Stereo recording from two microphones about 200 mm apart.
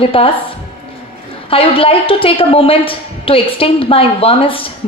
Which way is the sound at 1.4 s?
30° left (ahead or behind).